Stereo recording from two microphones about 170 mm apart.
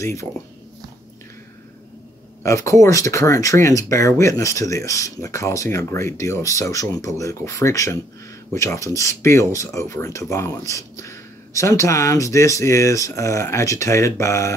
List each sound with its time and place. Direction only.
0.0 s speech: 15° left (ahead or behind)
2.4 s speech: 15° left (ahead or behind)